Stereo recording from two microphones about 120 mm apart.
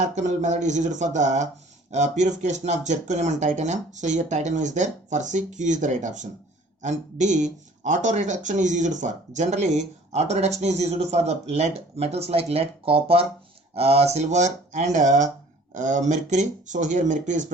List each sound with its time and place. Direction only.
0.0 s speech: 85° right